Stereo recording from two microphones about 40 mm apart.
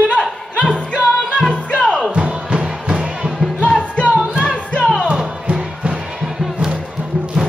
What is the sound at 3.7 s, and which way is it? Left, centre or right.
Music, left.